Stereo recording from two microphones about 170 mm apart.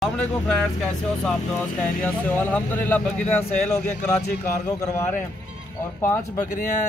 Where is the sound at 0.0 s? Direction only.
5° left (ahead or behind).